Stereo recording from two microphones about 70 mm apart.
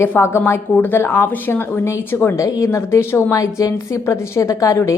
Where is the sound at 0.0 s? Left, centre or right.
Left.